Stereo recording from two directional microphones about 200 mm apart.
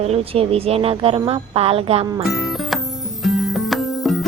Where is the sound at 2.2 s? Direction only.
Centre (ahead or behind).